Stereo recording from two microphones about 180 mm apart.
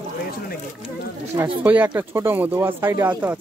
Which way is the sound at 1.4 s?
10° right (ahead or behind).